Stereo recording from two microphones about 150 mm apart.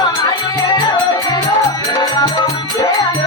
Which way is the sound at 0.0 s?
30° left (ahead or behind).